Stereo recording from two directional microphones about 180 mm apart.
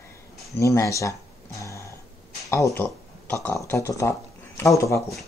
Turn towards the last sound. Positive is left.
turn(degrees=15)  # may be behind; listen again after turning